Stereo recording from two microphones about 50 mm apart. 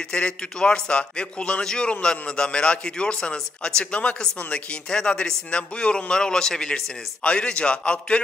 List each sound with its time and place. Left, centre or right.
0.1 s a man's voice: centre